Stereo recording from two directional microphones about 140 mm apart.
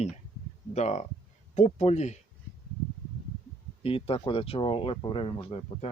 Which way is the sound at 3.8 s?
45° left (ahead or behind).